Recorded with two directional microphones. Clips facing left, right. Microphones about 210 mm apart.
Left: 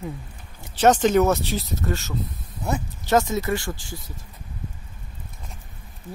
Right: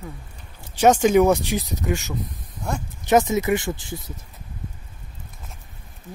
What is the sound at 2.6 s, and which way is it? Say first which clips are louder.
Speech: left 2 dB; 5° left (ahead or behind).